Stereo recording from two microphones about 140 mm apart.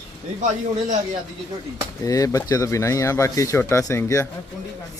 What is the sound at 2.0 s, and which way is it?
Speech, 25° left (ahead or behind).